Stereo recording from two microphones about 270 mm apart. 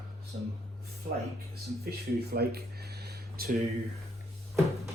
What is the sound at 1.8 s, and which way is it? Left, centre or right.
Speech, right.